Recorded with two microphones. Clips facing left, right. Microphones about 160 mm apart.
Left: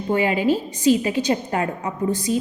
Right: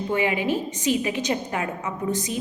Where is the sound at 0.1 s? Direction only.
35° left (ahead or behind).